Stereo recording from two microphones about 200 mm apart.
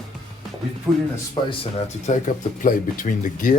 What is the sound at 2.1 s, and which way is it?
Speech, 40° left (ahead or behind).